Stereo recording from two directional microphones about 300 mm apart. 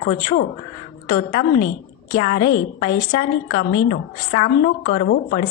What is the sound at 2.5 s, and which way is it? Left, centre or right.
Speech, left.